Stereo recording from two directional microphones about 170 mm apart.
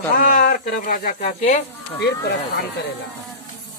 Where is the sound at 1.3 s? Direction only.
40° left (ahead or behind).